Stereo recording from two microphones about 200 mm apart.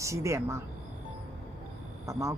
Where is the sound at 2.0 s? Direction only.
15° right (ahead or behind).